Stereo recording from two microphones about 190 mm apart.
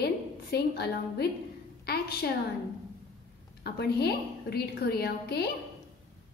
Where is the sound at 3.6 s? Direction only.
60° left (ahead or behind).